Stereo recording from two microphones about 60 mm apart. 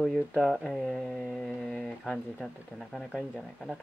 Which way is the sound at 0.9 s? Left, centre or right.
Centre.